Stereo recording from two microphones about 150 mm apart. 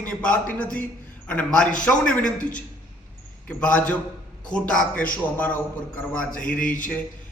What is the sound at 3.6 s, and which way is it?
A man's voice, 10° left (ahead or behind).